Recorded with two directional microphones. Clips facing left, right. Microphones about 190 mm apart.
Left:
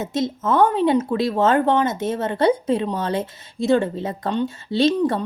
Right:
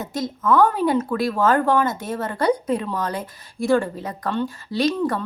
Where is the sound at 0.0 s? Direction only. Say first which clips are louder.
Left 3 dB; 25° left (ahead or behind).